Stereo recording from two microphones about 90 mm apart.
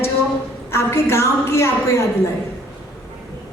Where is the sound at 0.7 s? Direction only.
30° left (ahead or behind).